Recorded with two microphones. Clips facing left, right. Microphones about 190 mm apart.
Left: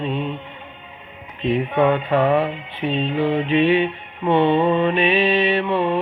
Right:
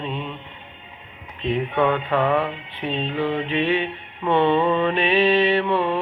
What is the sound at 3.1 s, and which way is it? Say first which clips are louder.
Music: left 3 dB; 45° left (ahead or behind).